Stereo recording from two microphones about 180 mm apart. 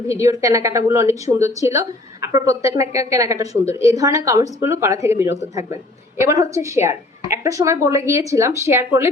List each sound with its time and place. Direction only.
0.1 s a woman's voice: 15° right (ahead or behind)